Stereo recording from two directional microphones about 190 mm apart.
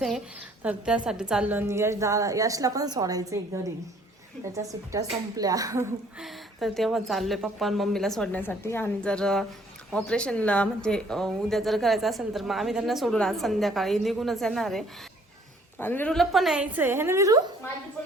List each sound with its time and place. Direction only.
0.6 s a woman's voice: 5° right (ahead or behind)
6.1 s speech: centre (ahead or behind); by 17.4 s 15° right (ahead or behind)